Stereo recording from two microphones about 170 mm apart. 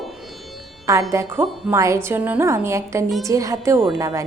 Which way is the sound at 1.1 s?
15° right (ahead or behind).